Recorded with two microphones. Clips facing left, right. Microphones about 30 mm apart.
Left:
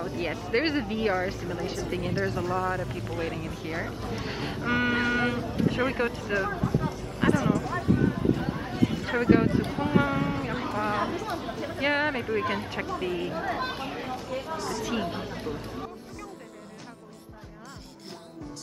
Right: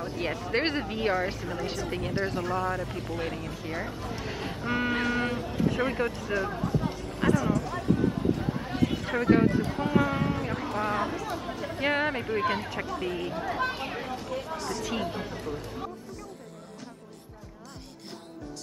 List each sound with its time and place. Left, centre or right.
0.2 s speech: centre
4.3 s speech: centre
4.6 s livestock: centre
5.6 s speech: centre
7.2 s a sound: centre
8.5 s a sound: centre
9.0 s speech: centre
13.7 s a sound: centre
14.1 s speech: centre